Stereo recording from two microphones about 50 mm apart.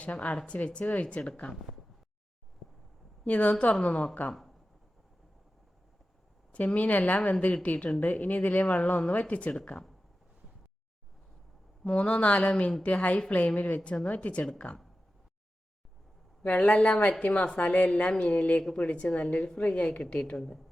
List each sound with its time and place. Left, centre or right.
0.0 s speech: left
3.2 s speech: left
6.5 s speech: left
11.9 s speech: left
16.4 s speech: left